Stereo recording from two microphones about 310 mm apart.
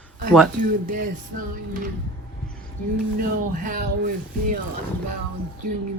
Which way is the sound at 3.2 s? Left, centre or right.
Right.